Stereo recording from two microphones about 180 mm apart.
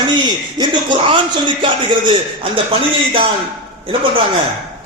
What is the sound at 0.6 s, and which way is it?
A man's voice, 25° right (ahead or behind).